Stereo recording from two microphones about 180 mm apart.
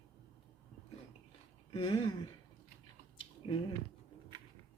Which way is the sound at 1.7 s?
30° left (ahead or behind).